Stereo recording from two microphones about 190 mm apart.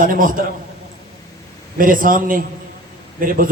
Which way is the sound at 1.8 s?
45° right (ahead or behind).